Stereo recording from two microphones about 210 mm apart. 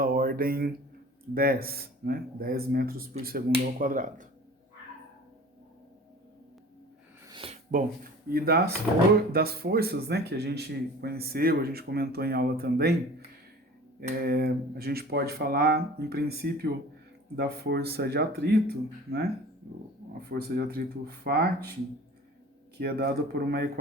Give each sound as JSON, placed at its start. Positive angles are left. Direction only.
{"t": 0.0, "sound": "mantra", "side_deg": -45}
{"t": 1.3, "sound": "speech", "side_deg": -45}
{"t": 7.3, "sound": "a sound", "side_deg": -25}
{"t": 7.7, "sound": "speech", "side_deg": -40}
{"t": 14.2, "sound": "speech", "side_deg": -45}
{"t": 22.8, "sound": "speech", "side_deg": -50}